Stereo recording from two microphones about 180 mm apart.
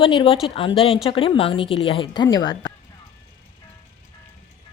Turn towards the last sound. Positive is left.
turn(degrees=25)  # may be behind; listen again after turning